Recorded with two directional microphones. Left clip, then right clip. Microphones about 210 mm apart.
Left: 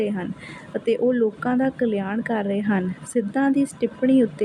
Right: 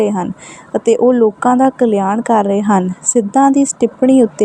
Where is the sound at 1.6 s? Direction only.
25° right (ahead or behind).